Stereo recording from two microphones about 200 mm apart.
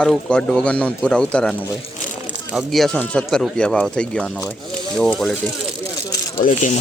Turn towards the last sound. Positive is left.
turn(degrees=40)  # may be behind; listen again after turning